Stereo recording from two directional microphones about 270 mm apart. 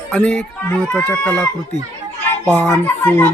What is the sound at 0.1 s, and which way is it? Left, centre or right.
Speech, centre.